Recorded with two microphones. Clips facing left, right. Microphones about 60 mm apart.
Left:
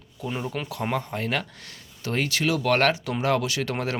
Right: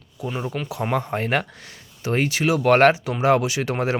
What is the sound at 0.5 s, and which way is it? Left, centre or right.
Speech, centre.